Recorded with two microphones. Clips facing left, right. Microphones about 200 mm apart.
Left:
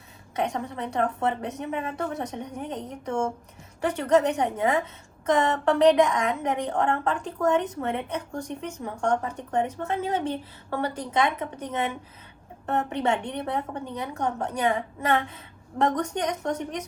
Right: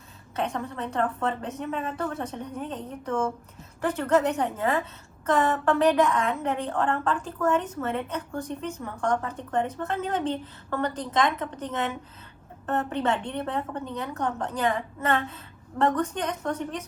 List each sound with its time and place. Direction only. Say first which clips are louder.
0.3 s a woman's voice: left 1 dB; 15° left (ahead or behind)
5.2 s a sound: left 1 dB; 15° left (ahead or behind)
6.0 s a woman's voice: left 1 dB; 15° left (ahead or behind)
7.4 s a woman's voice: left 2 dB; 35° left (ahead or behind)
7.8 s a woman's voice: even; 15° left (ahead or behind)